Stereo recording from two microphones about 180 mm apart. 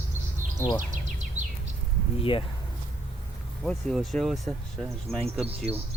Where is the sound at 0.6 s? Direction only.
15° left (ahead or behind).